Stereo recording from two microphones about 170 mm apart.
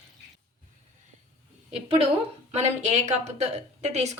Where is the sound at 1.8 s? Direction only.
35° right (ahead or behind).